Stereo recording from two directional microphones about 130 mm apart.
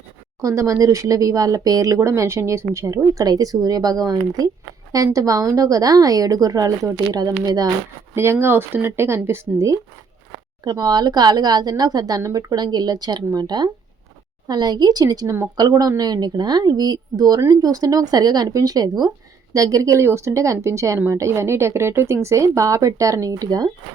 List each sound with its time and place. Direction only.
0.4 s speech: 25° right (ahead or behind)
10.6 s speech: 30° right (ahead or behind)